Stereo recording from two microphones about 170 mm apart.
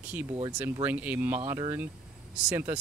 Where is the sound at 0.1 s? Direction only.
10° right (ahead or behind).